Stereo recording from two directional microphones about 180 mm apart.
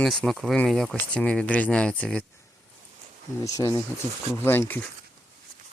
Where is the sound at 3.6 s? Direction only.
15° left (ahead or behind).